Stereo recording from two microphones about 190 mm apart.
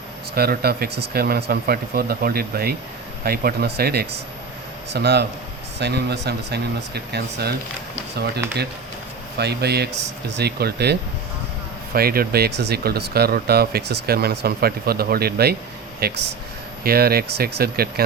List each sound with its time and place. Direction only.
0.3 s speech: 55° right (ahead or behind)
9.4 s speech: 60° right (ahead or behind)
11.9 s speech: 50° right (ahead or behind)